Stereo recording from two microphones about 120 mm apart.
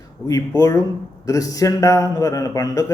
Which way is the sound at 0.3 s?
25° left (ahead or behind).